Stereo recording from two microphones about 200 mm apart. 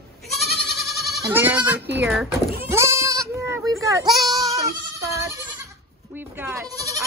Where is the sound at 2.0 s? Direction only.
5° right (ahead or behind).